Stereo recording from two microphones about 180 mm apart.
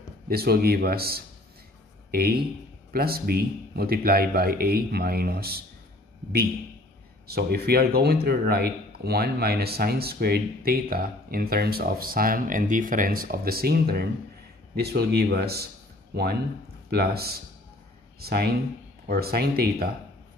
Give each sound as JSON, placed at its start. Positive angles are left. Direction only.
{"t": 0.3, "sound": "speech", "side_deg": -60}
{"t": 7.2, "sound": "a man's voice", "side_deg": -60}